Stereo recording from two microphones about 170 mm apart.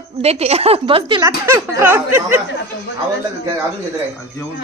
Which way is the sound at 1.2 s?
15° right (ahead or behind).